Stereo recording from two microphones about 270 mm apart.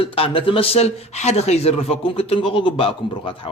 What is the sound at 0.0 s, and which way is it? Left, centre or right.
Speech, centre.